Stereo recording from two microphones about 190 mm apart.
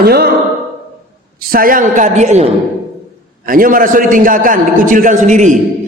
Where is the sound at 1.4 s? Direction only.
50° right (ahead or behind).